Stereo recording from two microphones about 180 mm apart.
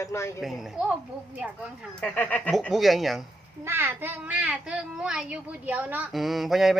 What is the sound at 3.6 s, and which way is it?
A child's voice, 15° right (ahead or behind).